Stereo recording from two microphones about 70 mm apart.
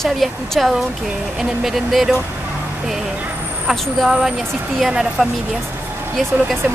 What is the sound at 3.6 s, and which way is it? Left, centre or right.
A woman's voice, centre.